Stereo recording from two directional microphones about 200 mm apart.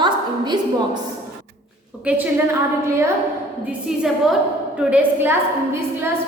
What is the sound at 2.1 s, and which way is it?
Speech, 10° right (ahead or behind).